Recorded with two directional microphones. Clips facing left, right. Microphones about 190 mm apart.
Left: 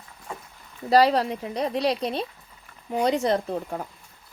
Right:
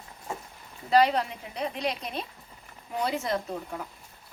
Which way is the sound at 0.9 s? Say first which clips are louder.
Left 4 dB; 35° left (ahead or behind).